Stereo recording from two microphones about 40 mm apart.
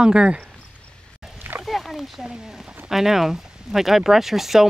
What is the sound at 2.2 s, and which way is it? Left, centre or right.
Speech, centre.